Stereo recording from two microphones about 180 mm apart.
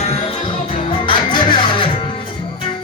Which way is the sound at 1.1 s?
25° left (ahead or behind).